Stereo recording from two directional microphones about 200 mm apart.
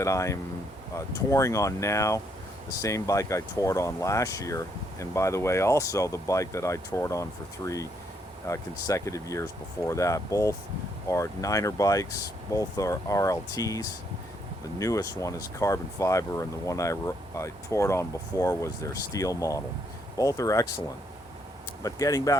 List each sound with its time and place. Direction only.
0.0 s speech: 15° left (ahead or behind)
21.8 s speech: 15° left (ahead or behind)